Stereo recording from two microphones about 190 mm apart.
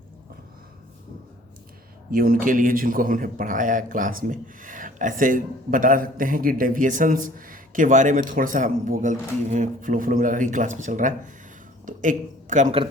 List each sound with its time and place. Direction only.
2.0 s speech: 50° right (ahead or behind)